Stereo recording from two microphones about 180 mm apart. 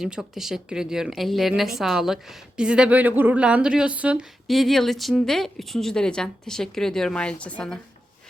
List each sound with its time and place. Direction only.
0.0 s a woman's voice: 5° right (ahead or behind)